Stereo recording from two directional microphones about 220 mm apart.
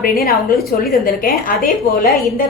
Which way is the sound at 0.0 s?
45° left (ahead or behind).